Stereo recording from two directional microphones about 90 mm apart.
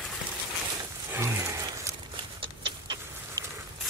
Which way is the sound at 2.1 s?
70° right (ahead or behind).